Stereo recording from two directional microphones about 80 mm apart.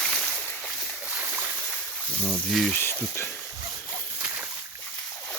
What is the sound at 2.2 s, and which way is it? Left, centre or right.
Speech, centre.